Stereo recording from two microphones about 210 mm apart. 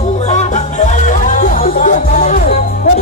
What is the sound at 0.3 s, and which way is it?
Music, 30° left (ahead or behind).